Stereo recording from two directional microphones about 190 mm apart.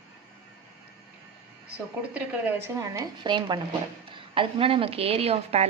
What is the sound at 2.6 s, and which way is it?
A woman's voice, 15° right (ahead or behind).